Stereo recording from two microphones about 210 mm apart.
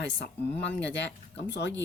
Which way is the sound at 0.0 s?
55° left (ahead or behind).